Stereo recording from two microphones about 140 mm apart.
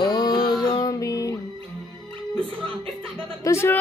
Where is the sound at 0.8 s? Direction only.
25° left (ahead or behind).